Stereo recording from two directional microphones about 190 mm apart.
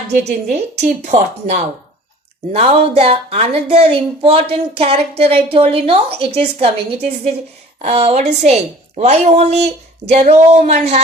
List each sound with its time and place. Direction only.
0.8 s a woman's voice: 40° right (ahead or behind)